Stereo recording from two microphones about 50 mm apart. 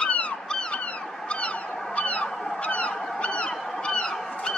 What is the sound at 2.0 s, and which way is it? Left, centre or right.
Goose, left.